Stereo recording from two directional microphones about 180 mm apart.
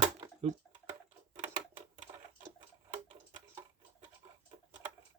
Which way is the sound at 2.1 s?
30° right (ahead or behind).